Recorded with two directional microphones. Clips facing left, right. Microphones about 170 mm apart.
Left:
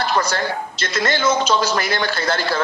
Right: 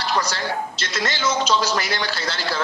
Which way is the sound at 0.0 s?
50° left (ahead or behind).